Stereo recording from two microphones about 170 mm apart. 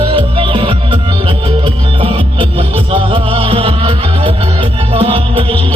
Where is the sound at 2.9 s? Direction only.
30° right (ahead or behind).